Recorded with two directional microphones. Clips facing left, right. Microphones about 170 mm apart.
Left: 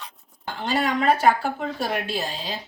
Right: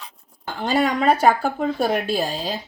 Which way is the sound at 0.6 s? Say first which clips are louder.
Right 3 dB; 40° right (ahead or behind).